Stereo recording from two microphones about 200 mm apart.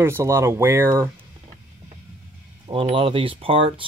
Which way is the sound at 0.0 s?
10° right (ahead or behind).